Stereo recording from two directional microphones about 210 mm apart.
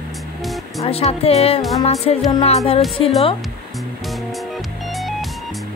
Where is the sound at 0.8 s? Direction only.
30° left (ahead or behind).